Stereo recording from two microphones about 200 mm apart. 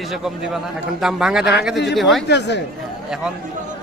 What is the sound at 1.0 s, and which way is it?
A man's voice, 5° right (ahead or behind).